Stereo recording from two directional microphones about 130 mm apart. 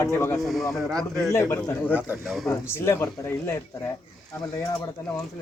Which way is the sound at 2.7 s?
20° left (ahead or behind).